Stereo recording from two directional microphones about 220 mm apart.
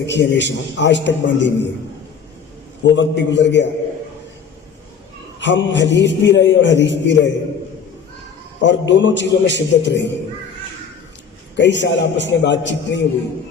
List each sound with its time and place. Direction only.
0.0 s a man's voice: 55° left (ahead or behind)
2.8 s a man's voice: 55° left (ahead or behind)
5.4 s a man's voice: 55° left (ahead or behind)
8.6 s a man's voice: 55° left (ahead or behind)
11.5 s a man's voice: 55° left (ahead or behind)